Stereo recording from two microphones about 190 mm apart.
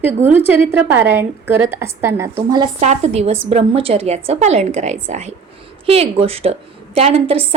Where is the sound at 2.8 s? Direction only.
35° right (ahead or behind).